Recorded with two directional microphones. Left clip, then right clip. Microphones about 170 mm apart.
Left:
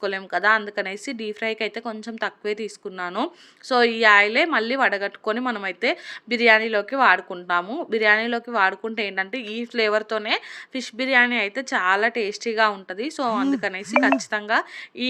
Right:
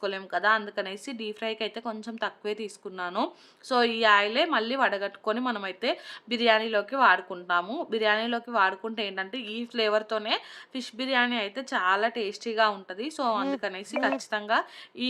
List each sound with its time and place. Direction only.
0.0 s a woman's voice: 15° left (ahead or behind)